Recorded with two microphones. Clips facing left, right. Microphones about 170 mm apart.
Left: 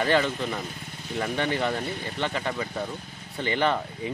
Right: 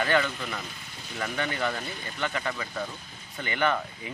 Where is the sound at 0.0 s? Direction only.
30° left (ahead or behind).